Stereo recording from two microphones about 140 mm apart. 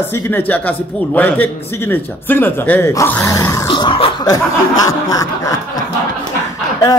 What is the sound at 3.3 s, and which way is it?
Chuckle, 20° left (ahead or behind).